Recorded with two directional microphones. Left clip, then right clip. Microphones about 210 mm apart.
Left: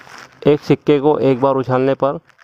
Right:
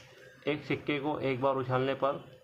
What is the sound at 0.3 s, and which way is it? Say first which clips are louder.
Speech: left 19 dB; 60° left (ahead or behind).